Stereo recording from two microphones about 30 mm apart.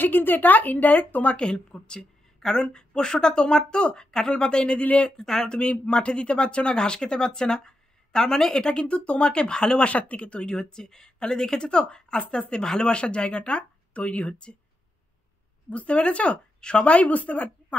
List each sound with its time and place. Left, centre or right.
0.0 s speech: left
1.3 s speech: left
5.1 s speech: centre
5.6 s speech: left
8.8 s speech: left
9.8 s speech: left
10.6 s speech: left
15.7 s speech: left
16.8 s speech: left